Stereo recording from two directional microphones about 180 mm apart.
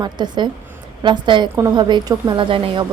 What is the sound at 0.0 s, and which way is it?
A woman's voice, 25° right (ahead or behind).